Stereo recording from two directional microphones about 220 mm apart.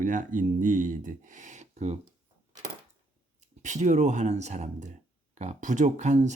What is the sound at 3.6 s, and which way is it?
Speech, 35° right (ahead or behind).